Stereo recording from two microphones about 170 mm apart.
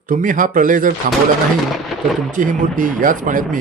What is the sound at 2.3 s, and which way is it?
Speech, 50° right (ahead or behind).